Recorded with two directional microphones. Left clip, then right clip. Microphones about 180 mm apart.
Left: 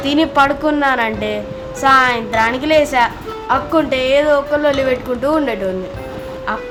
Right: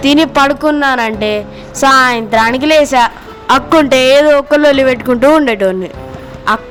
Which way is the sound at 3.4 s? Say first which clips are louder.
Right 7 dB; 60° right (ahead or behind).